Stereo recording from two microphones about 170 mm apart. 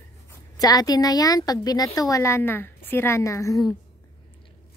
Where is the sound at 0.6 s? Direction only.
20° left (ahead or behind).